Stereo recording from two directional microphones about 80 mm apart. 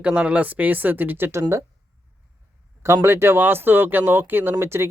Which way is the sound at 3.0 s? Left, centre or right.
Right.